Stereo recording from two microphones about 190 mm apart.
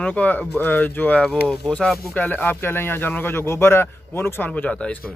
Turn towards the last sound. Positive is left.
turn(degrees=5)  # may be behind; listen again after turning